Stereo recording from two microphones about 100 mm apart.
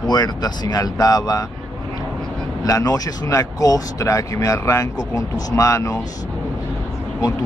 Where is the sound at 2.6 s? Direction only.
35° left (ahead or behind).